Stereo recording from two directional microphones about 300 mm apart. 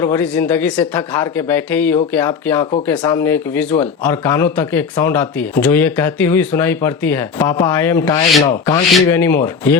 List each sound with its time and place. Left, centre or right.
0.0 s speech: centre